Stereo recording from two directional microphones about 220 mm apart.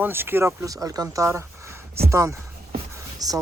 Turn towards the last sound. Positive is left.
turn(degrees=-15)  # may be behind; listen again after turning